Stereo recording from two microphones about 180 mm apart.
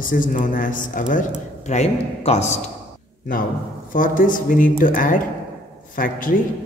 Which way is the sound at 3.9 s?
50° left (ahead or behind).